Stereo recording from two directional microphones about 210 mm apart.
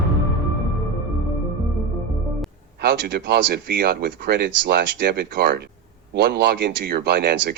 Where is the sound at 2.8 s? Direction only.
50° right (ahead or behind).